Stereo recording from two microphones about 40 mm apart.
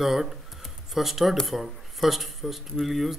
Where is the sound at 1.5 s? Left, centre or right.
Centre.